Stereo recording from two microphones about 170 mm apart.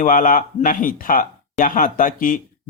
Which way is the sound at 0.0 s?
50° left (ahead or behind).